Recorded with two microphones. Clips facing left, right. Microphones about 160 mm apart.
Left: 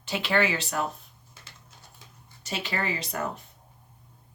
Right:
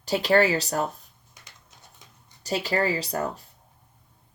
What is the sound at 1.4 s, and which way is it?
Typing, 15° right (ahead or behind).